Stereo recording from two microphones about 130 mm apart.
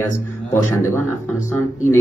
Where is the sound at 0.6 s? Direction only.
20° left (ahead or behind).